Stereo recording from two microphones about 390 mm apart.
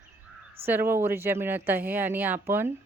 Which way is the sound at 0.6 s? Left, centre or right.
Centre.